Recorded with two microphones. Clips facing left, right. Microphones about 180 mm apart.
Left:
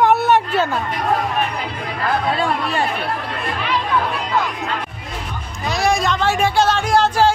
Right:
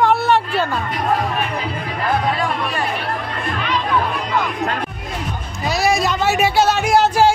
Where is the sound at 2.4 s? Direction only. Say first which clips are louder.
Left 2 dB; 25° left (ahead or behind).